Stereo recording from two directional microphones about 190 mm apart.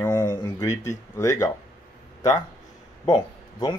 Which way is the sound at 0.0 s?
10° left (ahead or behind).